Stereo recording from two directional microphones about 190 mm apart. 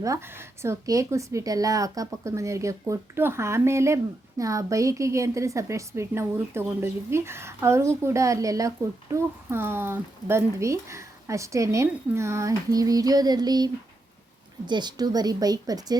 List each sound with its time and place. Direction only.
0.0 s a woman's voice: 15° right (ahead or behind)
14.7 s a woman's voice: 20° right (ahead or behind)